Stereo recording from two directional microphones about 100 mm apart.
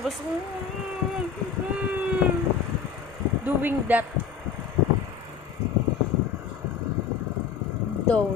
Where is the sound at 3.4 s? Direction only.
20° right (ahead or behind).